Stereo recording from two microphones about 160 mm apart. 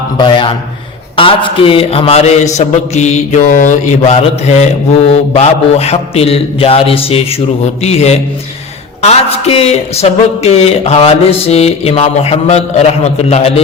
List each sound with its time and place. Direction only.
0.2 s a man's voice: 30° left (ahead or behind)